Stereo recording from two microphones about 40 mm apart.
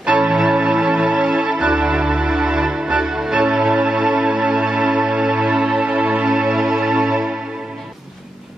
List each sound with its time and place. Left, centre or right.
0.0 s organ: right